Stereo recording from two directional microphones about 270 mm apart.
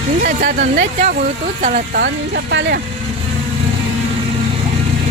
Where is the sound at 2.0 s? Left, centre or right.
Right.